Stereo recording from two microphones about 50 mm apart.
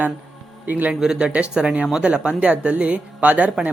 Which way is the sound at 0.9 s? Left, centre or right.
Centre.